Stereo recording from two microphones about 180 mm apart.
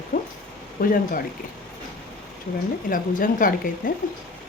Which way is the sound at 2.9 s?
50° left (ahead or behind).